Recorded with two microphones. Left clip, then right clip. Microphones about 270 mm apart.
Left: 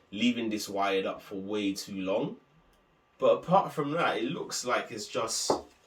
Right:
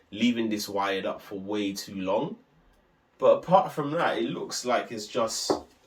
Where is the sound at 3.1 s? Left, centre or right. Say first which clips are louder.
Right 4 dB; centre.